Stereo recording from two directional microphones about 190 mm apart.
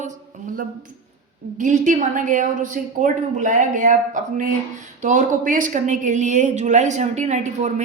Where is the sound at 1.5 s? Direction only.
40° right (ahead or behind).